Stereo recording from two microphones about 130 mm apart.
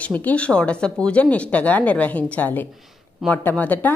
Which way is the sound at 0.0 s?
10° left (ahead or behind).